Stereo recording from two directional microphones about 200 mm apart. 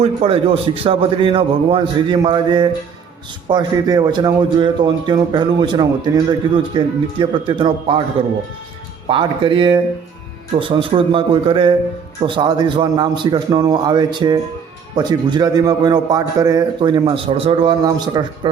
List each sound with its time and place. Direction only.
0.0 s a man's voice: 30° right (ahead or behind)
9.0 s a man's voice: 25° right (ahead or behind)